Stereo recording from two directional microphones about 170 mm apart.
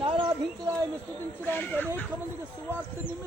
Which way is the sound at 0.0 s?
30° right (ahead or behind).